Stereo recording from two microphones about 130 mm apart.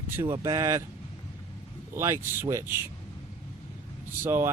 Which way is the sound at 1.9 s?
20° right (ahead or behind).